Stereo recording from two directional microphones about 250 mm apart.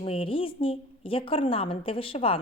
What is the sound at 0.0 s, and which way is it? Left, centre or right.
A woman's voice, left.